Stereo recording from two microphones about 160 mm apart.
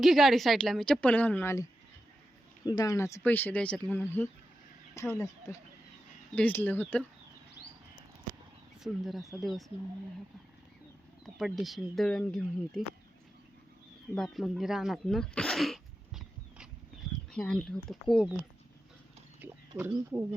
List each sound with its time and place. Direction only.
0.0 s a woman's voice: centre (ahead or behind)
2.6 s speech: 25° left (ahead or behind)
8.8 s a woman's voice: centre (ahead or behind)
11.3 s a woman's voice: centre (ahead or behind)
14.2 s a woman's voice: centre (ahead or behind)
19.4 s a sound: 10° right (ahead or behind)